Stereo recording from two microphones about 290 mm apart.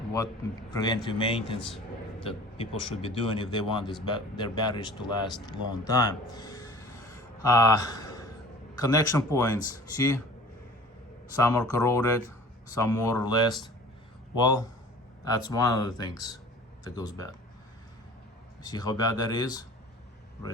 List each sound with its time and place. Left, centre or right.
0.7 s a man's voice: centre
5.7 s a sound: centre
8.7 s speech: centre
11.3 s speech: centre
18.6 s speech: centre